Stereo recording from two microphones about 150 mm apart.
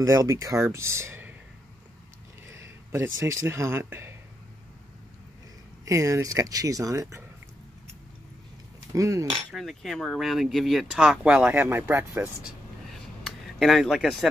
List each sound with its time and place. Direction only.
0.0 s speech: 25° right (ahead or behind)
2.4 s speech: 20° right (ahead or behind)
5.9 s speech: 20° right (ahead or behind)
8.9 s speech: 20° right (ahead or behind)
9.5 s speech: centre (ahead or behind)